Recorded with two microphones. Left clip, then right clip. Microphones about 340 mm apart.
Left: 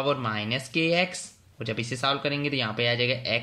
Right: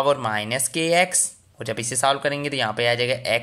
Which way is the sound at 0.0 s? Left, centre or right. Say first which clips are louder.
Right 6 dB; centre.